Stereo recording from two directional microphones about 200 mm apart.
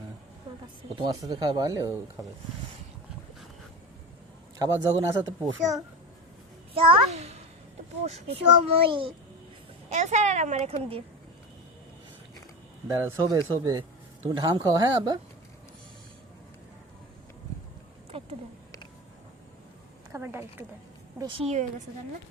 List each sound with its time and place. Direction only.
0.5 s a sound: 25° right (ahead or behind)
0.9 s a child's voice: 20° right (ahead or behind)
4.5 s a child's voice: 20° right (ahead or behind)
6.7 s a woman's voice: 30° right (ahead or behind)
13.0 s a child's voice: 15° right (ahead or behind)
18.1 s a sound: 30° right (ahead or behind)
20.1 s speech: 10° right (ahead or behind)
21.2 s a child's voice: 25° right (ahead or behind)